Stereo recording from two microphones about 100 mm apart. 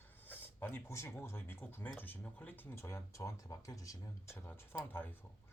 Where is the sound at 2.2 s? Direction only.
15° left (ahead or behind); by 4.3 s 35° left (ahead or behind).